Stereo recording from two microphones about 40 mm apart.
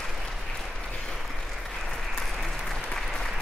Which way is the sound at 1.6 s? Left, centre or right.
Centre.